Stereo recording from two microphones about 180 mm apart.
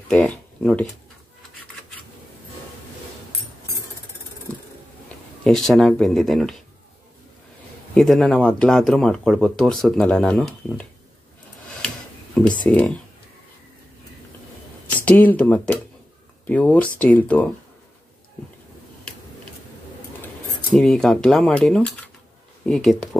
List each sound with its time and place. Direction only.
0.1 s speech: 5° left (ahead or behind)
5.4 s speech: centre (ahead or behind)
7.9 s speech: centre (ahead or behind)
12.6 s speech: 10° left (ahead or behind)
15.0 s speech: 10° left (ahead or behind)
20.7 s speech: 5° left (ahead or behind)